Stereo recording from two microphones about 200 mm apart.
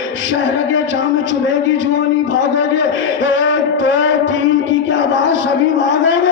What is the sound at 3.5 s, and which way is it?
Music, 65° left (ahead or behind).